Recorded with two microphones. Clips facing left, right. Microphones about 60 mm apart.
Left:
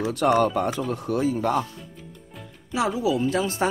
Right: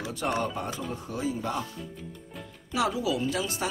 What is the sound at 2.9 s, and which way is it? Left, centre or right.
Speech, left.